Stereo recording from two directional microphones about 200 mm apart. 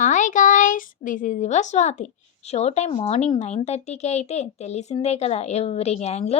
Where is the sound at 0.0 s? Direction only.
40° left (ahead or behind).